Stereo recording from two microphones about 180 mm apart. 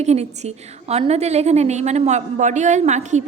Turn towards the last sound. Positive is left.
turn(degrees=-40)  # may be behind; listen again after turning